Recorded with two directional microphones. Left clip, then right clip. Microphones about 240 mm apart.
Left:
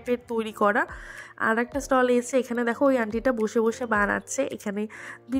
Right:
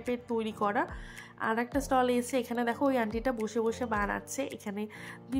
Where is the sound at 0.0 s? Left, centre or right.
Left.